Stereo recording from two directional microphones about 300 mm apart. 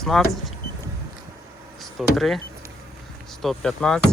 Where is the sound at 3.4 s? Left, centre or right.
Centre.